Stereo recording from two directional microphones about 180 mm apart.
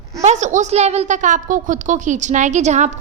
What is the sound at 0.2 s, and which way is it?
A woman's voice, 40° right (ahead or behind).